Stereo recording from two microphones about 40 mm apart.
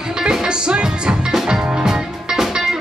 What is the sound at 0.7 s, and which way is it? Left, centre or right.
Music, right.